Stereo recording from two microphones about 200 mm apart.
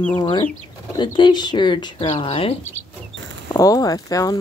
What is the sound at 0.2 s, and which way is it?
Speech, 25° left (ahead or behind).